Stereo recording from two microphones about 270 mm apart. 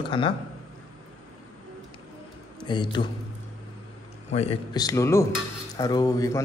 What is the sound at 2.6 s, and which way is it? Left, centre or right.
Speech, centre.